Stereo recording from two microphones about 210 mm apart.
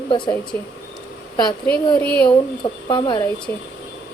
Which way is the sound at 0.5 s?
10° left (ahead or behind).